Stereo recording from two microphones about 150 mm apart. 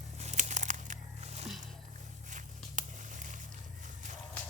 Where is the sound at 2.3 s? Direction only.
55° right (ahead or behind).